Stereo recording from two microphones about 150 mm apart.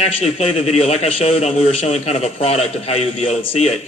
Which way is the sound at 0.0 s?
45° left (ahead or behind).